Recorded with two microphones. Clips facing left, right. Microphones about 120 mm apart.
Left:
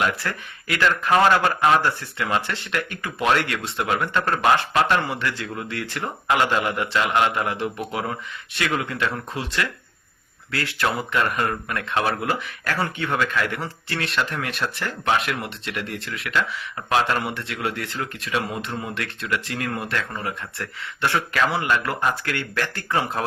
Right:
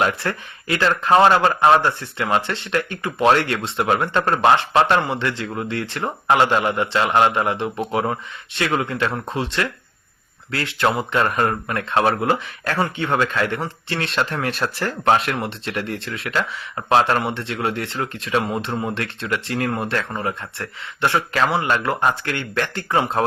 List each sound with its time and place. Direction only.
0.0 s speech: 30° right (ahead or behind)